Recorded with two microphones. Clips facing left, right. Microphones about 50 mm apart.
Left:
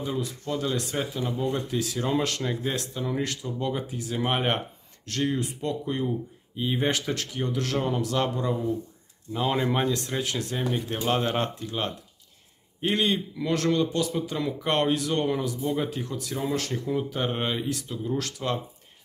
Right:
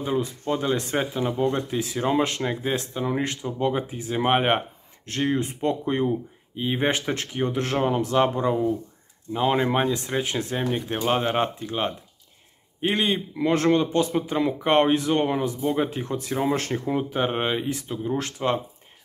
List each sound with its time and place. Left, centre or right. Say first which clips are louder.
0.0 s a man's voice: right 5 dB; right
6.5 s a man's voice: right 2 dB; right